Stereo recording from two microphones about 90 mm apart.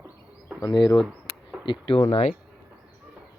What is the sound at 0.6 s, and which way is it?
Speech, 50° left (ahead or behind).